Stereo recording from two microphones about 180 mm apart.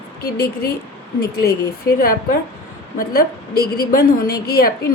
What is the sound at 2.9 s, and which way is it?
A woman's voice, 60° left (ahead or behind).